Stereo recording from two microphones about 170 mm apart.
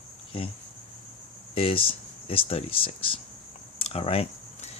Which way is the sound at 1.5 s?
35° left (ahead or behind).